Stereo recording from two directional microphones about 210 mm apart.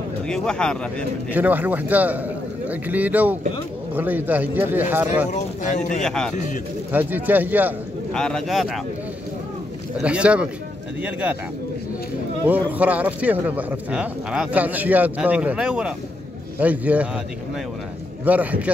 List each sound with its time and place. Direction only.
0.3 s speech: 5° left (ahead or behind)
1.3 s a man's voice: 10° right (ahead or behind)
5.3 s speech: 35° left (ahead or behind)
6.0 s a man's voice: 5° left (ahead or behind)
6.3 s speech: 35° left (ahead or behind)
6.9 s a man's voice: 10° right (ahead or behind)
8.1 s speech: 5° left (ahead or behind)
10.0 s a man's voice: 5° right (ahead or behind)
12.4 s a man's voice: 5° right (ahead or behind)
18.2 s a man's voice: 5° right (ahead or behind)